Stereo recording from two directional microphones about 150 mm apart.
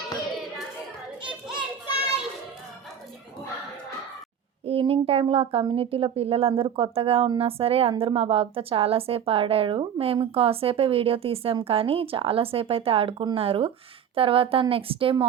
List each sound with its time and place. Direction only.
4.6 s speech: 40° right (ahead or behind)